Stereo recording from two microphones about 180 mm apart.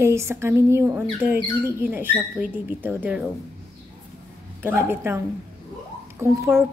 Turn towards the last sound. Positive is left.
turn(degrees=-15)  # may be behind; listen again after turning